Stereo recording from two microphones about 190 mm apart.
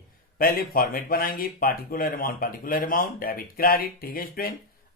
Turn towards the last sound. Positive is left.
turn(degrees=50)  # may be behind; listen again after turning